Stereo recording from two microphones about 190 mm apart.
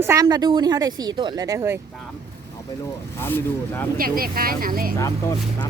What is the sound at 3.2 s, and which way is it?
Speech, 10° left (ahead or behind).